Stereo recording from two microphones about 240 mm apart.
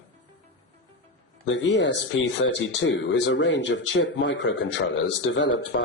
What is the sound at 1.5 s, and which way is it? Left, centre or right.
Speech, left.